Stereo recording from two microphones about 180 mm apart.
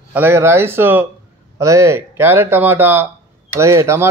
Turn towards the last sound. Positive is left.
turn(degrees=-15)  # may be behind; listen again after turning